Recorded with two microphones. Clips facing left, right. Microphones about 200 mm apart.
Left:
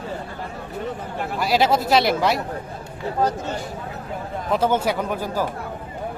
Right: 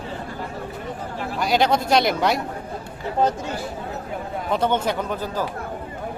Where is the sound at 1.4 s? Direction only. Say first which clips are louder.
Even; centre (ahead or behind).